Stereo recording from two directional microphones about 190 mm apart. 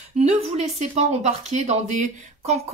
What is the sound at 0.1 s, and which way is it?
Speech, 35° right (ahead or behind).